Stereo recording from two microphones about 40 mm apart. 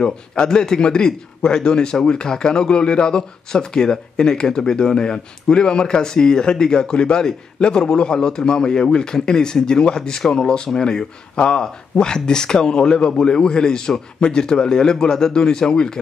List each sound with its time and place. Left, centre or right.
0.0 s speech: centre